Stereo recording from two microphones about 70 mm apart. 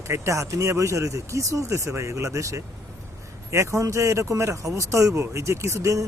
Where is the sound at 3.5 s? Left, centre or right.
Right.